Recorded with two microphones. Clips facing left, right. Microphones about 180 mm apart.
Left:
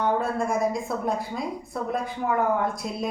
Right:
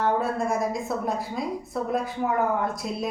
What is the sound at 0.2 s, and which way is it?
A woman's voice, centre (ahead or behind).